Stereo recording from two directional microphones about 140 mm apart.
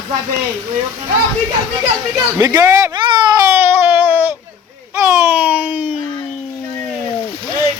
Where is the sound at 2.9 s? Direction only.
30° right (ahead or behind).